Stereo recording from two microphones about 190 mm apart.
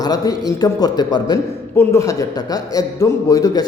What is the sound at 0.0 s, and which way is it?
A man's voice, 20° left (ahead or behind).